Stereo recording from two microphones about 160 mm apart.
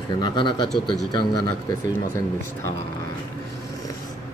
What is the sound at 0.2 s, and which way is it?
Speech, 30° left (ahead or behind).